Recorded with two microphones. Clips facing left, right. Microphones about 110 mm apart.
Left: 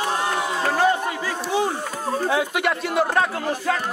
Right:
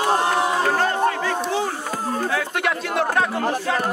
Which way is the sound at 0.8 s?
10° left (ahead or behind).